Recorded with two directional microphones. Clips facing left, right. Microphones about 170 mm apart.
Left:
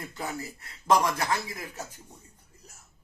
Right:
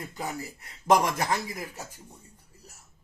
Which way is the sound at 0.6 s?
20° right (ahead or behind).